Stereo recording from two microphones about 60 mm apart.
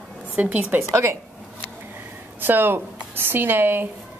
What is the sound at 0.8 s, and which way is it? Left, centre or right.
Speech, right.